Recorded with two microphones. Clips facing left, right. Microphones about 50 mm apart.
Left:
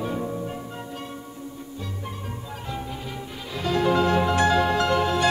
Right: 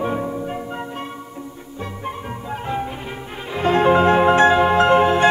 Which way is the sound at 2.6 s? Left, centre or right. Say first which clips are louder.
Right 7 dB; right.